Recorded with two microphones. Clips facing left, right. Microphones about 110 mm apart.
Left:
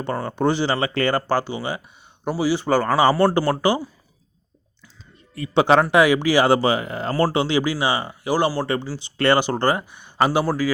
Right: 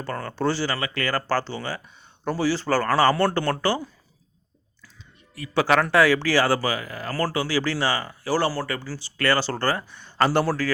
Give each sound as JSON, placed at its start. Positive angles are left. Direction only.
{"t": 0.0, "sound": "speech", "side_deg": 20}
{"t": 1.3, "sound": "speech", "side_deg": 15}
{"t": 5.3, "sound": "speech", "side_deg": 25}